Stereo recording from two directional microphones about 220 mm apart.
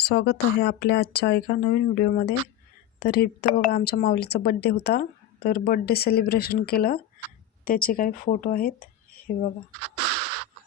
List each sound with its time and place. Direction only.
0.0 s speech: 45° left (ahead or behind)